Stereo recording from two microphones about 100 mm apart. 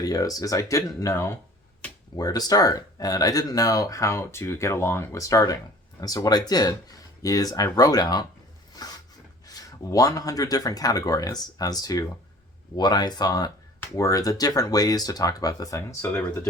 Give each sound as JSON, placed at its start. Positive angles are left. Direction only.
{"t": 0.0, "sound": "speech", "side_deg": 35}
{"t": 2.1, "sound": "speech", "side_deg": 40}
{"t": 8.8, "sound": "a sound", "side_deg": 40}
{"t": 9.9, "sound": "speech", "side_deg": 35}
{"t": 13.8, "sound": "speech", "side_deg": 30}